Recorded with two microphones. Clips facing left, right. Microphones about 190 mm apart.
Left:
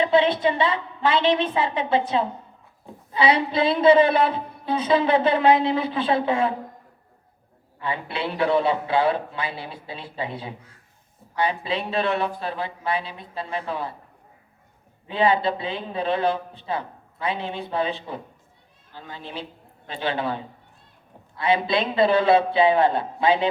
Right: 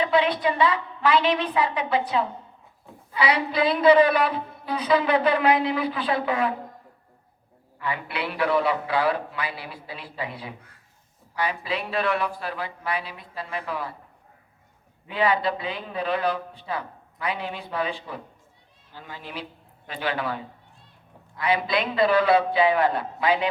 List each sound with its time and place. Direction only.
0.0 s a woman's voice: 25° left (ahead or behind)
7.8 s a woman's voice: 25° left (ahead or behind)
15.0 s a woman's voice: 25° left (ahead or behind)